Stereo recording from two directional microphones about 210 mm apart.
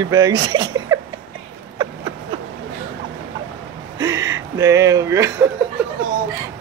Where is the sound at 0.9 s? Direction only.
15° right (ahead or behind).